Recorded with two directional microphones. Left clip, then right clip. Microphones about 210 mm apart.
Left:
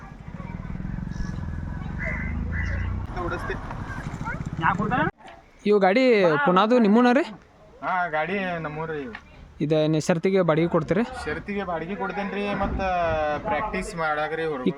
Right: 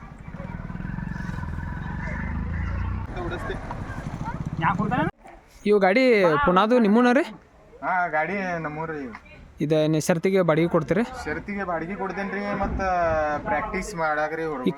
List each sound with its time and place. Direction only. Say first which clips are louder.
3.2 s speech: left 2 dB; 15° right (ahead or behind)
4.6 s speech: left 1 dB; 35° right (ahead or behind)
5.6 s speech: even; 5° left (ahead or behind)
7.8 s a man's voice: right 1 dB; 20° left (ahead or behind)
9.6 s speech: even; centre (ahead or behind)
11.3 s speech: even; 20° left (ahead or behind)